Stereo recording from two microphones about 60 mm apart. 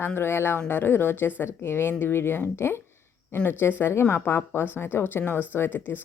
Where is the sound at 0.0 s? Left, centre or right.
Left.